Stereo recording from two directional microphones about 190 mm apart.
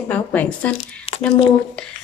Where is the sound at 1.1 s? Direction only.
30° left (ahead or behind).